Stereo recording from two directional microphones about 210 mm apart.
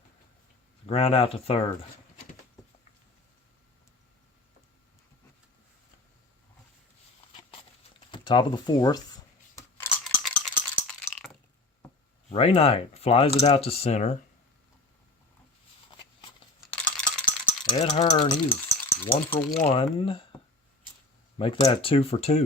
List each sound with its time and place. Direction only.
0.9 s speech: 25° left (ahead or behind)
8.1 s speech: 20° left (ahead or behind)
9.6 s scissors: 10° left (ahead or behind)
10.0 s a sound: centre (ahead or behind)
12.3 s speech: 30° left (ahead or behind)
16.7 s rattle: 5° left (ahead or behind)
17.7 s speech: 30° left (ahead or behind)
18.4 s rattle: 10° left (ahead or behind)
19.5 s speech: 30° left (ahead or behind)